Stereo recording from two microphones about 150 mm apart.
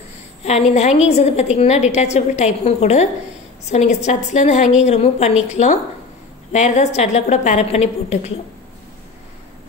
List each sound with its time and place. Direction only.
0.4 s a woman's voice: 45° left (ahead or behind)